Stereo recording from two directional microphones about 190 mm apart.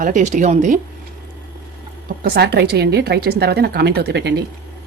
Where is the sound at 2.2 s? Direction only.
55° right (ahead or behind).